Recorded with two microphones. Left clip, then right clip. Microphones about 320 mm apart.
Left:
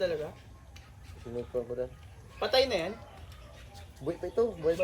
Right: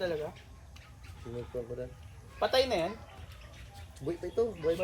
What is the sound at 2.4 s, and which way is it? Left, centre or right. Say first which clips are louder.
Speech: left 1 dB; centre.